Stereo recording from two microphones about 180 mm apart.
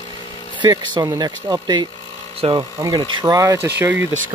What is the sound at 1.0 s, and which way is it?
Speech, 20° right (ahead or behind).